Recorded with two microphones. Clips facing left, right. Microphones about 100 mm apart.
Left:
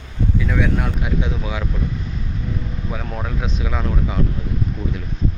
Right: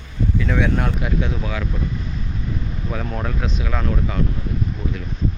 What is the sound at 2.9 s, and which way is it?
Speech, 5° left (ahead or behind).